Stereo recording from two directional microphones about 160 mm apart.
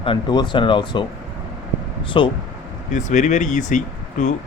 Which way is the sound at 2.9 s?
50° left (ahead or behind).